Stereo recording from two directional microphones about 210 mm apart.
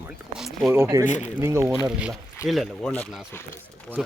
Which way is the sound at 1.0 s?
35° left (ahead or behind).